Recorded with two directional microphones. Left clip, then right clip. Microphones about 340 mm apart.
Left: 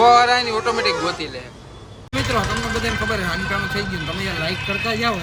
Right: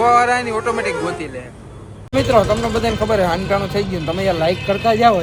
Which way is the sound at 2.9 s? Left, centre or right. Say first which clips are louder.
Right 9 dB; centre.